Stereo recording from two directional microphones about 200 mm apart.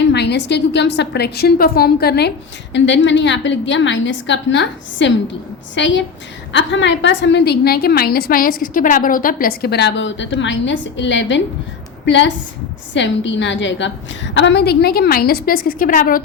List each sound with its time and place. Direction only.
0.0 s a woman's voice: 60° left (ahead or behind)